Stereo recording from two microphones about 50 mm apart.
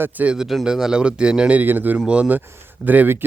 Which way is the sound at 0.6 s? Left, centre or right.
Centre.